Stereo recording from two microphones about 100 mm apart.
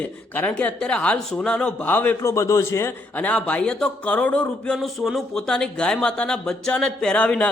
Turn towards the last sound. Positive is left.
turn(degrees=10)  # may be behind; listen again after turning